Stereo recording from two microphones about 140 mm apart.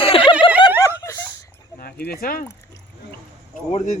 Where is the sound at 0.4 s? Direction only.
40° left (ahead or behind).